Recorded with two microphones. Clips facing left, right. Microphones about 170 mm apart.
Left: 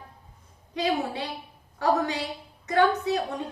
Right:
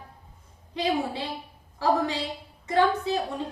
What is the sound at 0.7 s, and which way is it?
A woman's voice, 25° right (ahead or behind).